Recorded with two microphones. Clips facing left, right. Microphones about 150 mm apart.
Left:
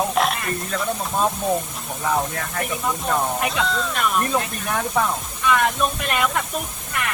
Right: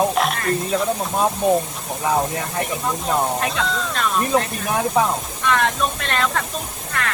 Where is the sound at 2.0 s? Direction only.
15° right (ahead or behind).